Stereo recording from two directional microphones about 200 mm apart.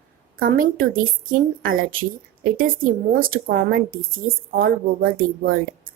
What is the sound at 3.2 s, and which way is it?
Speech, 45° right (ahead or behind).